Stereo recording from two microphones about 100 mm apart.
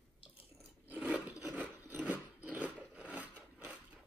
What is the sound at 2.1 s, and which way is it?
Biting, 15° right (ahead or behind).